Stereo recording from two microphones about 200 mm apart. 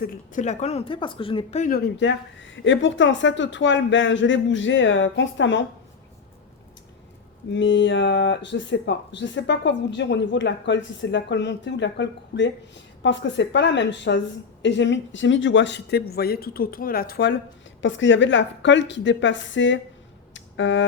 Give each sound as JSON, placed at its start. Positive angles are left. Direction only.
{"t": 0.0, "sound": "speech", "side_deg": 40}
{"t": 7.5, "sound": "speech", "side_deg": 65}
{"t": 17.8, "sound": "a woman's voice", "side_deg": 70}
{"t": 20.3, "sound": "a sound", "side_deg": 65}